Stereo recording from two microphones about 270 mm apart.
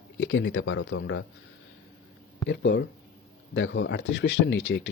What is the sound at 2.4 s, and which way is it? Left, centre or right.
Speech, left.